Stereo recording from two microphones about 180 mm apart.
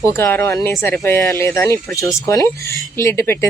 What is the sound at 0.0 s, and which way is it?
Speech, 15° left (ahead or behind).